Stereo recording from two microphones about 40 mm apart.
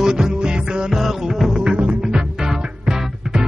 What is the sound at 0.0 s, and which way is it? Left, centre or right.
Music, centre.